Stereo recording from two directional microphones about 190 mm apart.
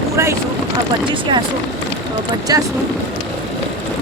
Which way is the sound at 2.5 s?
20° right (ahead or behind).